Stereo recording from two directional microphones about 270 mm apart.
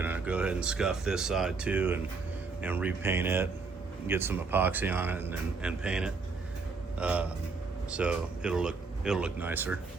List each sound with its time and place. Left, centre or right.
0.0 s speech: centre